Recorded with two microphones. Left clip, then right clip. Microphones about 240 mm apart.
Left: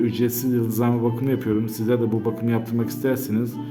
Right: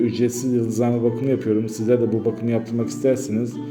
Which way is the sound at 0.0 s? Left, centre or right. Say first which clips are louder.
Right 2 dB; centre.